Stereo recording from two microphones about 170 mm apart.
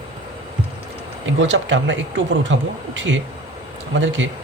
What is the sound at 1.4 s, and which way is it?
Speech, 90° right.